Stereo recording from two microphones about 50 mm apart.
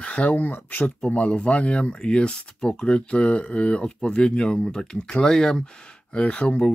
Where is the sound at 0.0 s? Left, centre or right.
Left.